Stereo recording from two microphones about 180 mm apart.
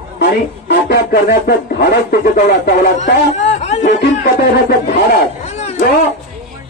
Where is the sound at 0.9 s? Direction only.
65° left (ahead or behind).